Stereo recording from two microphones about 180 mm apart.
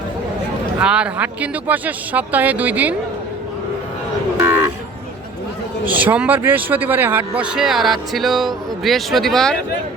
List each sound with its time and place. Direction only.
0.8 s speech: 5° right (ahead or behind)
5.8 s a man's voice: 10° right (ahead or behind)